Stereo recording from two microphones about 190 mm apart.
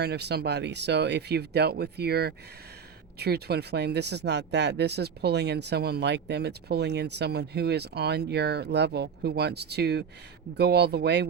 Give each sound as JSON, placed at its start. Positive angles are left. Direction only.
{"t": 0.0, "sound": "speech", "side_deg": -60}